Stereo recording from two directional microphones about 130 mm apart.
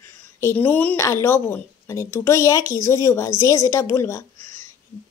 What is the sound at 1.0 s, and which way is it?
A woman's voice, 20° left (ahead or behind).